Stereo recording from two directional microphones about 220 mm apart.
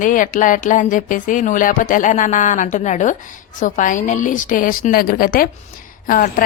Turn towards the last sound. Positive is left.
turn(degrees=40)  # may be behind; listen again after turning